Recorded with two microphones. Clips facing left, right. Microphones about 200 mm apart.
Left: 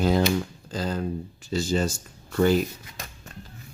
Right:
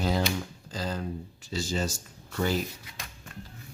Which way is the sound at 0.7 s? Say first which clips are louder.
Left 5 dB; 55° left (ahead or behind).